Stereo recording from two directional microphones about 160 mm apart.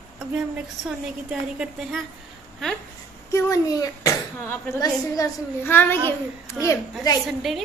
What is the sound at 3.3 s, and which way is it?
Speech, 20° left (ahead or behind).